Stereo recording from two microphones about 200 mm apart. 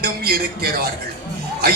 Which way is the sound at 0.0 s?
50° right (ahead or behind).